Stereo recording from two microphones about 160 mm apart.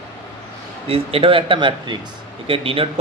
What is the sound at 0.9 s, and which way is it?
A man's voice, 35° right (ahead or behind).